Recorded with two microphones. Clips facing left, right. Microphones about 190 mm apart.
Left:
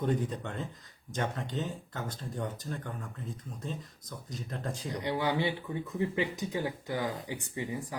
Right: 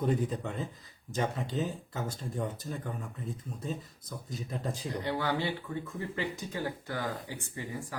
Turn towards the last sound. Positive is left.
turn(degrees=15)  # may be behind; listen again after turning